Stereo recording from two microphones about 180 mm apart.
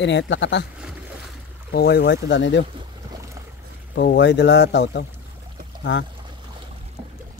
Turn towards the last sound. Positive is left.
turn(degrees=90)